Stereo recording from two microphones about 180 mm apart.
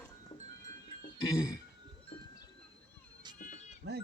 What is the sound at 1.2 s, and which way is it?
Music, 20° left (ahead or behind).